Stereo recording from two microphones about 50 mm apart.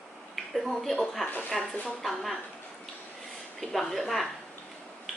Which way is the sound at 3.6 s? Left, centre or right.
Centre.